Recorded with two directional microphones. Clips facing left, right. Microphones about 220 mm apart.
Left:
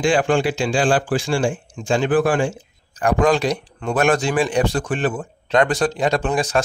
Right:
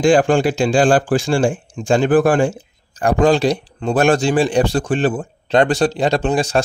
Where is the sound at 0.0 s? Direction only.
40° right (ahead or behind).